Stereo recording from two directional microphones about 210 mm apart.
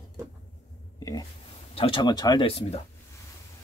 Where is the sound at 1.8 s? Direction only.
25° left (ahead or behind).